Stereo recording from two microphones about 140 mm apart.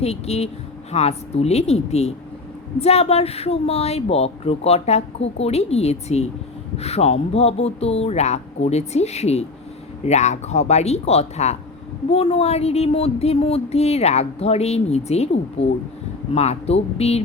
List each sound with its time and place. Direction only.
0.0 s speech: 50° left (ahead or behind)